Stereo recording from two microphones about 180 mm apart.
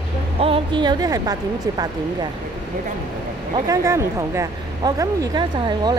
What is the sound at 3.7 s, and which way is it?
Speech, 15° right (ahead or behind).